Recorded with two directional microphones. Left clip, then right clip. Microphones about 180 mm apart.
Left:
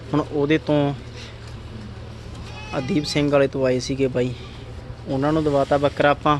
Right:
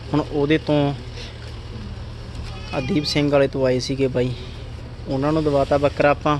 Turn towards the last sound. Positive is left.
turn(degrees=5)  # may be behind; listen again after turning